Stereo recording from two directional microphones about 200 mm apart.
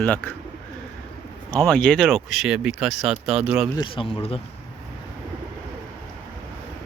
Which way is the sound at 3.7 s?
20° left (ahead or behind).